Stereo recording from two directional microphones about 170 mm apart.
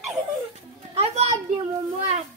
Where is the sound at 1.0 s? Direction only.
40° right (ahead or behind).